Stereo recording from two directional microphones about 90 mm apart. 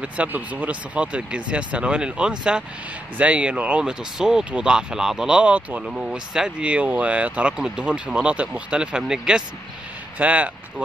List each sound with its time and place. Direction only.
0.0 s speech: 15° right (ahead or behind)